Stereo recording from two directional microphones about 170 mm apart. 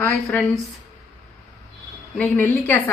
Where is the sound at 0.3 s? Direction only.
5° left (ahead or behind).